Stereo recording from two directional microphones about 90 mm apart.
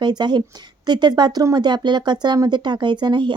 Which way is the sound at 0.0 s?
55° right (ahead or behind).